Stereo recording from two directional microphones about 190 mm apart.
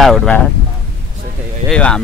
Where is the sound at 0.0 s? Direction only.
Centre (ahead or behind).